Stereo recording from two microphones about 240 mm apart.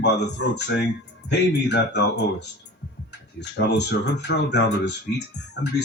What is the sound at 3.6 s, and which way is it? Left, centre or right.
Speech, left.